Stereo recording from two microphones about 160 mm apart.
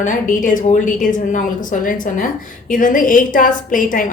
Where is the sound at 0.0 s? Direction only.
55° left (ahead or behind).